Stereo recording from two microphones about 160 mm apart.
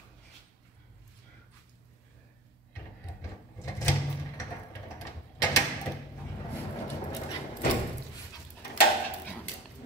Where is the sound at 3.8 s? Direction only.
20° left (ahead or behind).